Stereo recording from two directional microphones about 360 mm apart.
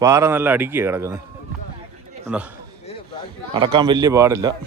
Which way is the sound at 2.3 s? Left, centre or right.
Centre.